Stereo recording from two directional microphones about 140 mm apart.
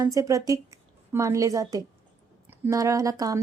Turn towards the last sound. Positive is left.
turn(degrees=-25)  # may be behind; listen again after turning